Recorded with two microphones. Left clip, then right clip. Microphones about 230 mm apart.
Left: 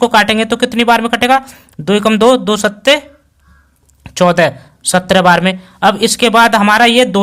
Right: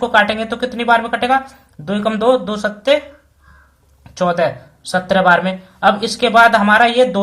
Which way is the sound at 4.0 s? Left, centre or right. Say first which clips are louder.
Left 6 dB; left.